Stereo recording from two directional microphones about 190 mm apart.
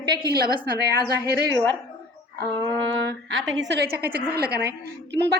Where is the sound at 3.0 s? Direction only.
65° right (ahead or behind).